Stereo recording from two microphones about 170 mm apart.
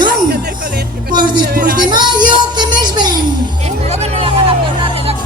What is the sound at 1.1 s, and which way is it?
Music, 25° right (ahead or behind).